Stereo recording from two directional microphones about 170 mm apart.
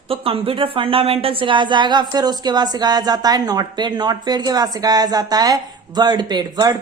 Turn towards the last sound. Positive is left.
turn(degrees=-25)  # may be behind; listen again after turning